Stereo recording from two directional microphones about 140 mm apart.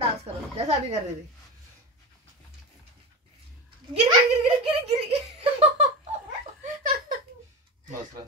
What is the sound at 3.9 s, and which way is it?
Speech, 40° right (ahead or behind).